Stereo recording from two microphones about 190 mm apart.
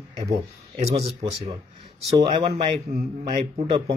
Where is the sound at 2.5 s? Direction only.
40° right (ahead or behind).